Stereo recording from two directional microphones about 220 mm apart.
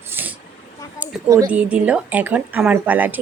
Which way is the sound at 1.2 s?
15° right (ahead or behind).